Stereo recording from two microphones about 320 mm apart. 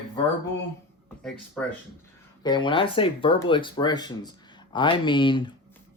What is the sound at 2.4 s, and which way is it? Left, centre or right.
Speech, centre.